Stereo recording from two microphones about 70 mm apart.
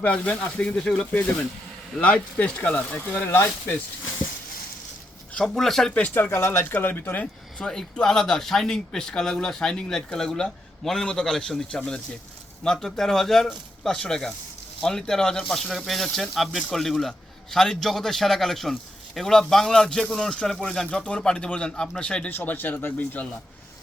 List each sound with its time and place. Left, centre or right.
0.0 s a man's voice: left
5.5 s speech: centre
5.9 s speech: left
6.3 s speech: left
7.6 s a man's voice: centre
22.3 s speech: left